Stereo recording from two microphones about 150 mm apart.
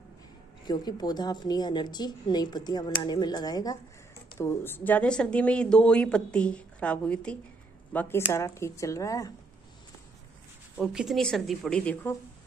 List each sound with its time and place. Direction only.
0.7 s a woman's voice: 25° left (ahead or behind)
10.8 s speech: 5° right (ahead or behind)